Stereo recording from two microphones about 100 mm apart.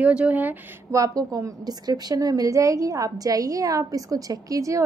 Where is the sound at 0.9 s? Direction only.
35° right (ahead or behind).